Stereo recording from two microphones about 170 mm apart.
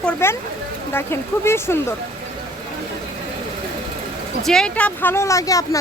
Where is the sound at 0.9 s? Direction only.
15° left (ahead or behind).